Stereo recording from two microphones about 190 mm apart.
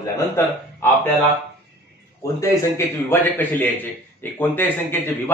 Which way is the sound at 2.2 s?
15° left (ahead or behind).